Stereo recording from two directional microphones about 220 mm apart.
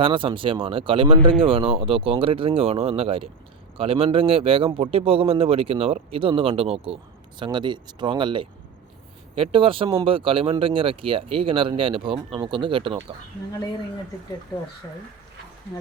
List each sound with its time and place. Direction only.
0.0 s a man's voice: 25° right (ahead or behind)